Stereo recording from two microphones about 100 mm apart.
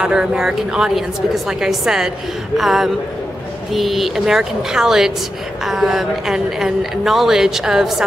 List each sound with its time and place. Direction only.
0.0 s a woman's voice: 5° right (ahead or behind)